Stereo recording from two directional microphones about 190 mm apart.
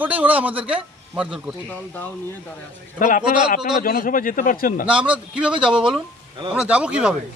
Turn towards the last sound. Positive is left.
turn(degrees=-5)  # may be behind; listen again after turning